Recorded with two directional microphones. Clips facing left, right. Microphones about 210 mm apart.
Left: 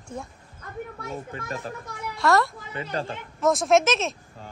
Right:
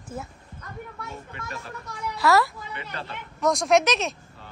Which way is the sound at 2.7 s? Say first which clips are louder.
Left 6 dB; 40° left (ahead or behind).